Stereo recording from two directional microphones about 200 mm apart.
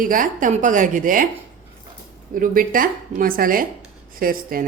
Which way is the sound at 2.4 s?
45° right (ahead or behind).